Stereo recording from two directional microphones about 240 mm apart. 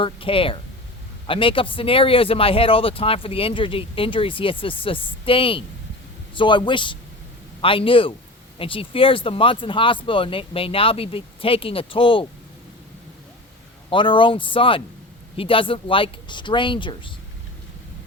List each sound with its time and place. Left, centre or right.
0.0 s speech: left
13.9 s speech: left